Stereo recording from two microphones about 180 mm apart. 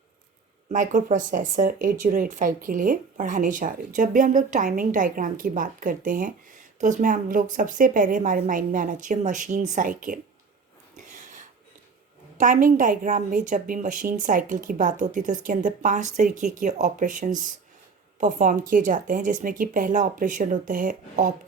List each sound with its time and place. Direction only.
0.7 s a woman's voice: 45° right (ahead or behind)
11.1 s a sound: 45° right (ahead or behind)
12.4 s a woman's voice: 50° right (ahead or behind)